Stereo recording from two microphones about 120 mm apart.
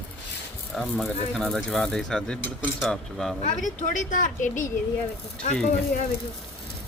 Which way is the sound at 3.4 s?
90° left.